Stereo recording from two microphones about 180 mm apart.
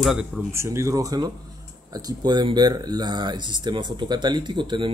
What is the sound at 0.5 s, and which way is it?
Speech, 15° right (ahead or behind).